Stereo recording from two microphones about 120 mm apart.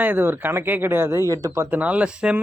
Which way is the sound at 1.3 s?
30° right (ahead or behind).